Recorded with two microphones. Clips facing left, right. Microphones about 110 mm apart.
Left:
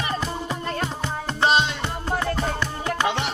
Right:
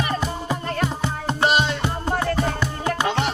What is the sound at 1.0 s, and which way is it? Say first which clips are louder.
Music: right 2 dB; 15° right (ahead or behind).